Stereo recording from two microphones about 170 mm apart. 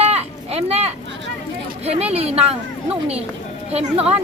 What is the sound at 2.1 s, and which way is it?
Speech, 40° right (ahead or behind).